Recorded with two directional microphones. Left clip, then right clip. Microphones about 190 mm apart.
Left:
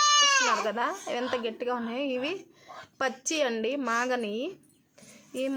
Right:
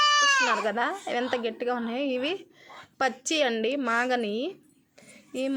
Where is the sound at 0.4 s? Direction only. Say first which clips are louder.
Right 1 dB; 20° right (ahead or behind).